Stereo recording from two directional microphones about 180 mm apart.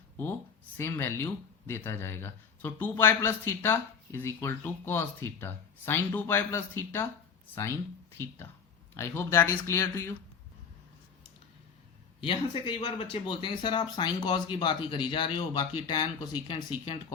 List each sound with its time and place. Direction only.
0.8 s speech: 15° left (ahead or behind)
9.0 s speech: 10° left (ahead or behind)
12.2 s speech: 30° left (ahead or behind)